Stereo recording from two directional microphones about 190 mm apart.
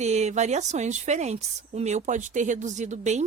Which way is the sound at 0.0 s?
35° right (ahead or behind).